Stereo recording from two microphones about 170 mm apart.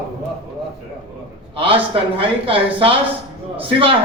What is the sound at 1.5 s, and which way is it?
A man's voice, 30° right (ahead or behind).